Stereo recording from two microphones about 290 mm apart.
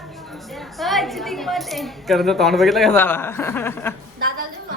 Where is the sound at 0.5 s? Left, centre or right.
Centre.